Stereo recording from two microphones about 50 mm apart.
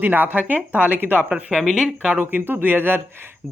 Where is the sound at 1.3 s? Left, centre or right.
Centre.